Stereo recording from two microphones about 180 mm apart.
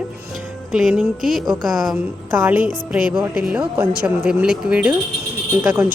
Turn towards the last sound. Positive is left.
turn(degrees=-10)  # may be behind; listen again after turning